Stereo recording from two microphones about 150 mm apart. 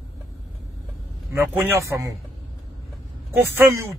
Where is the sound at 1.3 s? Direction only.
15° right (ahead or behind).